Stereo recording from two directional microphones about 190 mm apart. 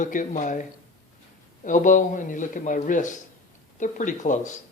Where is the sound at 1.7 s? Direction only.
40° left (ahead or behind).